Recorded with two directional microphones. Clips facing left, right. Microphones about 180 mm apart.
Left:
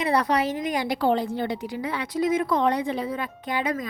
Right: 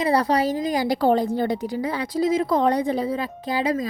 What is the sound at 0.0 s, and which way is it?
A woman's voice, 35° right (ahead or behind).